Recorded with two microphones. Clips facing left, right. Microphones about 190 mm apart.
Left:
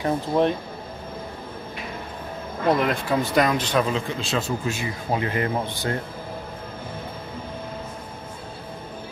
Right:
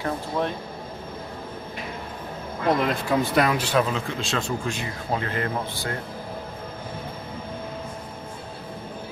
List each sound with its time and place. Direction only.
0.0 s speech: 20° left (ahead or behind)
2.8 s speech: centre (ahead or behind); by 5.9 s 15° left (ahead or behind)